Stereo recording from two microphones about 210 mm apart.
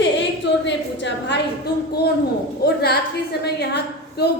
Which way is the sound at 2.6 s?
50° left (ahead or behind).